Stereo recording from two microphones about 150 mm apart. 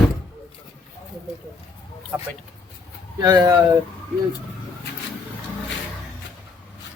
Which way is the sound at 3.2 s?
25° right (ahead or behind).